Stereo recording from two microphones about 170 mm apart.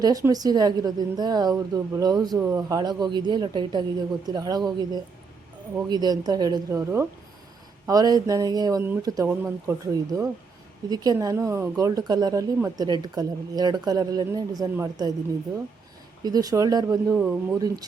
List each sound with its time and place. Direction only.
0.0 s speech: 20° right (ahead or behind)
5.9 s speech: 25° right (ahead or behind)
16.2 s speech: 20° right (ahead or behind)
17.2 s speech: 10° right (ahead or behind)